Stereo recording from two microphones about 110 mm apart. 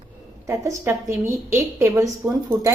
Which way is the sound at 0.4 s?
30° right (ahead or behind).